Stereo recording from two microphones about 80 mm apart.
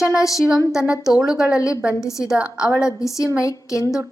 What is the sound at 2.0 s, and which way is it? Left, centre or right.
Speech, left.